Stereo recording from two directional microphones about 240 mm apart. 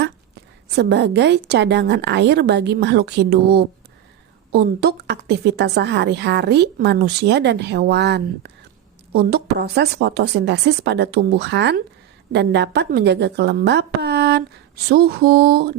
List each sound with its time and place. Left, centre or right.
0.8 s a woman's voice: right
14.8 s mantra: right